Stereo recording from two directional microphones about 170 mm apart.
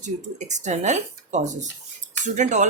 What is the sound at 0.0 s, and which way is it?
Speech, 45° right (ahead or behind).